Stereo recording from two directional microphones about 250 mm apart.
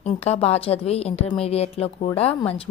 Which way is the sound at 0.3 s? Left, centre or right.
Left.